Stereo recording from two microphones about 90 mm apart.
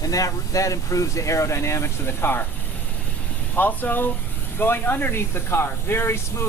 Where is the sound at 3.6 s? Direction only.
20° left (ahead or behind).